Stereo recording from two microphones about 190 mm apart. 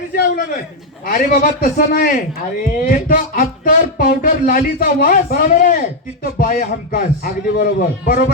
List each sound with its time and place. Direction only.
0.1 s speech: 50° left (ahead or behind)